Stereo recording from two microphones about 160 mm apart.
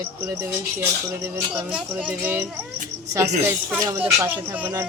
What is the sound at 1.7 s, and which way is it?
Speech, 5° right (ahead or behind).